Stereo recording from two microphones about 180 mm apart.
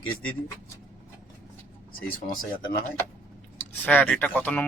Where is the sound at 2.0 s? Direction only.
50° left (ahead or behind).